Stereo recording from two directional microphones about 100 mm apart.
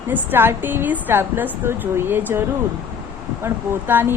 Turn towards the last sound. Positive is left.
turn(degrees=-20)  # may be behind; listen again after turning